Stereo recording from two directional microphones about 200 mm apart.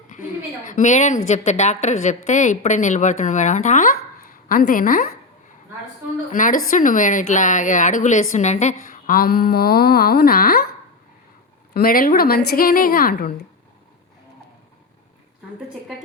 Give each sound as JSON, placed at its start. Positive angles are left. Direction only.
{"t": 0.1, "sound": "a woman's voice", "side_deg": 40}
{"t": 6.3, "sound": "a woman's voice", "side_deg": 40}
{"t": 11.7, "sound": "a woman's voice", "side_deg": 45}